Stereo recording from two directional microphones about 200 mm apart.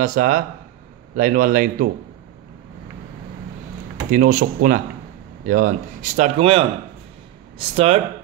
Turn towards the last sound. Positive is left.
turn(degrees=-30)  # may be behind; listen again after turning